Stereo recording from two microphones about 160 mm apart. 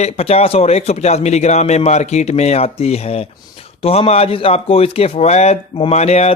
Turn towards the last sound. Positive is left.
turn(degrees=40)  # may be behind; listen again after turning